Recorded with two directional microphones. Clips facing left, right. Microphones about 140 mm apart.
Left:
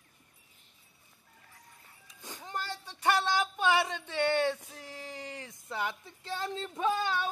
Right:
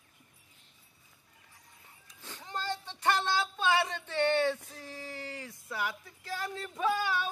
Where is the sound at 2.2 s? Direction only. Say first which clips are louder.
Right 2 dB; 15° left (ahead or behind).